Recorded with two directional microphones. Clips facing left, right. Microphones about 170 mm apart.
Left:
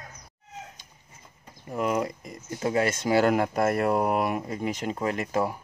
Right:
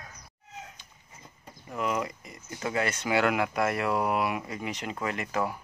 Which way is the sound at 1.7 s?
45° left (ahead or behind).